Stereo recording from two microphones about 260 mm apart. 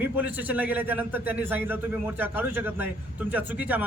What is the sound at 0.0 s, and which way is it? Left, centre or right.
A man's voice, centre.